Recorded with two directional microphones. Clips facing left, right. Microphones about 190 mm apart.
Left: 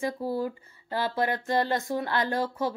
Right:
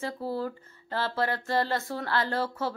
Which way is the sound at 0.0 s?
15° left (ahead or behind).